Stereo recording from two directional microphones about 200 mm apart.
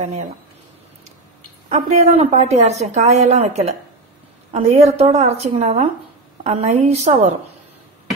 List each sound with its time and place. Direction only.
0.0 s a woman's voice: 35° right (ahead or behind)
1.7 s a woman's voice: 35° right (ahead or behind)